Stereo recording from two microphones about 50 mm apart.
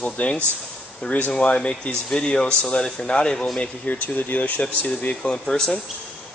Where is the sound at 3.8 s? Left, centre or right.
Left.